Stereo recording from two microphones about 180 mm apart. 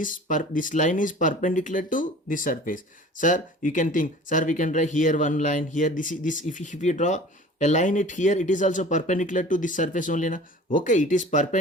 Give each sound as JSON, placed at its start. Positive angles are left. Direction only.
{"t": 0.0, "sound": "speech", "side_deg": 45}